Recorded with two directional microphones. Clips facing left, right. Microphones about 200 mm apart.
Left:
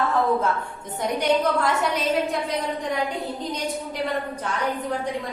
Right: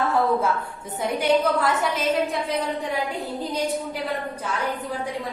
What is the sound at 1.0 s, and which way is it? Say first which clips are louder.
A woman's voice: right 1 dB; centre (ahead or behind).